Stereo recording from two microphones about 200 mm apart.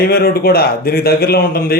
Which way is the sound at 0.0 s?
50° left (ahead or behind).